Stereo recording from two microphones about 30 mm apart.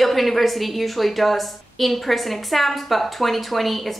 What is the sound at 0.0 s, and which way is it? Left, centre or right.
Speech, centre.